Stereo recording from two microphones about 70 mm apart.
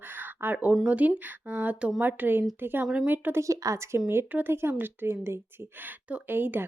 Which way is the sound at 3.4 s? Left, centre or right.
Right.